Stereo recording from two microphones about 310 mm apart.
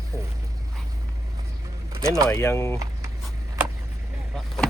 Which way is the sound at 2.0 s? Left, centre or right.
Centre.